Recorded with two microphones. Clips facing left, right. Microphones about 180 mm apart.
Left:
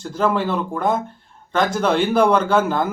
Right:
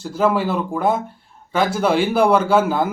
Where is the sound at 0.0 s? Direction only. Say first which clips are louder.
Right 2 dB; 5° right (ahead or behind).